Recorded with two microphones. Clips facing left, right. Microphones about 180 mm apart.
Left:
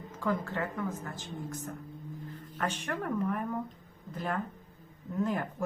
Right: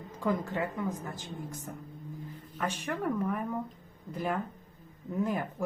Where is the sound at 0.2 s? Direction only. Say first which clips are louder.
Right 1 dB; 15° right (ahead or behind).